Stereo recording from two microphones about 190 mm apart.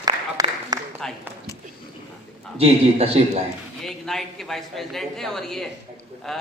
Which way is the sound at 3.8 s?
Centre (ahead or behind).